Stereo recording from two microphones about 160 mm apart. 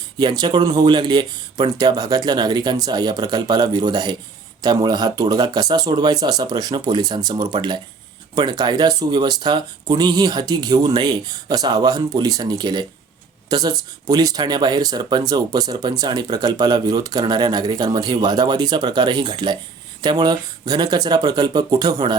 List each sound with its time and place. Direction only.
0.2 s speech: 30° right (ahead or behind)